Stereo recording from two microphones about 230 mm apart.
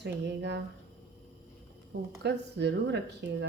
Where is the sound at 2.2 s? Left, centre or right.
Right.